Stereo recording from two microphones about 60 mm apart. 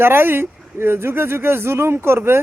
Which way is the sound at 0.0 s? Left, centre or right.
Right.